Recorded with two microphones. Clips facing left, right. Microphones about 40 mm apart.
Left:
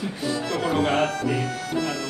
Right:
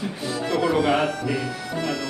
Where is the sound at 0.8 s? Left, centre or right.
Centre.